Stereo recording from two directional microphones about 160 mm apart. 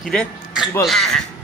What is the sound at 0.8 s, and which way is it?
Speech, centre (ahead or behind).